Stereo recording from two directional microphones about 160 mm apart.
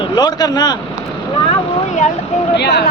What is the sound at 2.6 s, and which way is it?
Speech, 90° left.